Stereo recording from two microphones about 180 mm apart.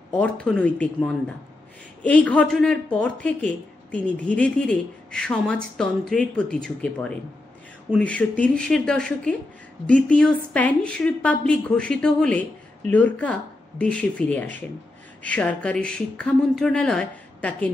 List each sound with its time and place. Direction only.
0.2 s speech: 5° left (ahead or behind)